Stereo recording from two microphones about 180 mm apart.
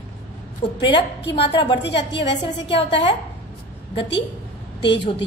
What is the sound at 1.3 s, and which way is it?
Speech, 30° left (ahead or behind).